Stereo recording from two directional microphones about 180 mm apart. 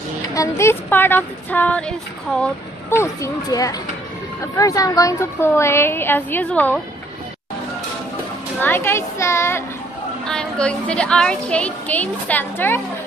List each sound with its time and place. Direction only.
0.3 s a child's voice: 15° left (ahead or behind)
8.5 s a child's voice: 10° left (ahead or behind)
10.2 s a child's voice: 5° left (ahead or behind)